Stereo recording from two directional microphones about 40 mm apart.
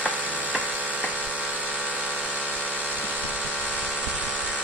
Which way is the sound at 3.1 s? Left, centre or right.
Right.